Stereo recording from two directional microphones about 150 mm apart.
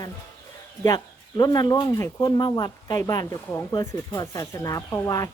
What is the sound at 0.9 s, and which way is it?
Speech, 25° left (ahead or behind).